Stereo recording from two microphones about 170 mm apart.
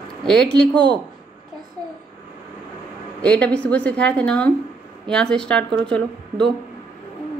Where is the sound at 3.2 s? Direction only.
5° left (ahead or behind).